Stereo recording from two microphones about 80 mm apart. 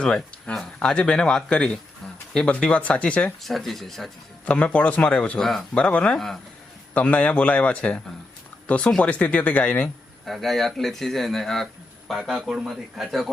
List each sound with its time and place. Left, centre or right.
0.0 s a man's voice: centre
3.4 s speech: centre
4.4 s a man's voice: centre
5.4 s a man's voice: centre
6.1 s speech: centre
6.9 s a man's voice: centre
10.2 s speech: centre